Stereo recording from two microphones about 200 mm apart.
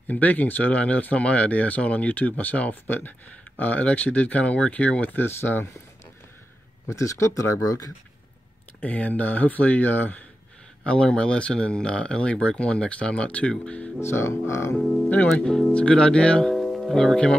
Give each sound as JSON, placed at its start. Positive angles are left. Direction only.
{"t": 0.1, "sound": "speech", "side_deg": 10}
{"t": 6.9, "sound": "speech", "side_deg": 15}
{"t": 14.8, "sound": "speech", "side_deg": 0}